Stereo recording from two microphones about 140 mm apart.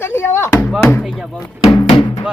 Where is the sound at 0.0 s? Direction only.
15° left (ahead or behind).